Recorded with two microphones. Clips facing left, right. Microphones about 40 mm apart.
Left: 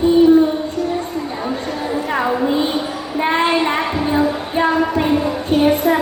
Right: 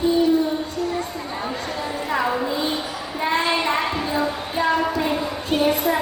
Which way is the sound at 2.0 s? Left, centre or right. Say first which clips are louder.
Left 4 dB; left.